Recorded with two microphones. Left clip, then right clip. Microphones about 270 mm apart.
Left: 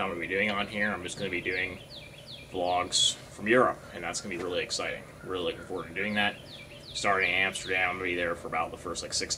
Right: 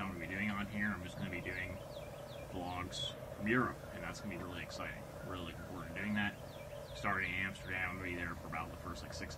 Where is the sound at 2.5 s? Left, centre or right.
Right.